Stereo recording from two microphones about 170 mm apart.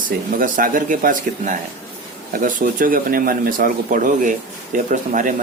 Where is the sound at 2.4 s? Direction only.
50° right (ahead or behind).